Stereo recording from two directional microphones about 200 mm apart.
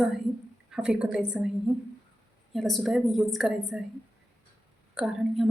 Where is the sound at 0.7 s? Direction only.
5° right (ahead or behind).